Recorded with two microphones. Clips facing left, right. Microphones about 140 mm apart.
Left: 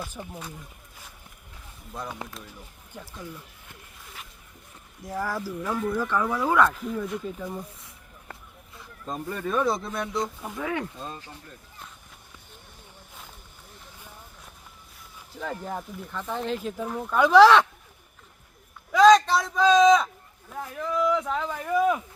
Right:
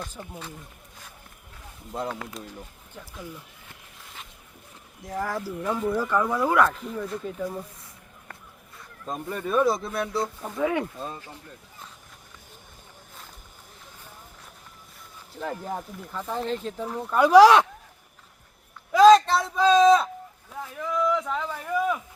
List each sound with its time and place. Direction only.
0.0 s speech: 10° left (ahead or behind)
5.2 s speech: 10° left (ahead or behind)
5.7 s speech: 5° right (ahead or behind)
9.1 s speech: 10° right (ahead or behind)
10.6 s speech: 15° right (ahead or behind)
15.4 s speech: 5° right (ahead or behind)
18.9 s a sound: 5° right (ahead or behind); by 22.0 s 15° left (ahead or behind)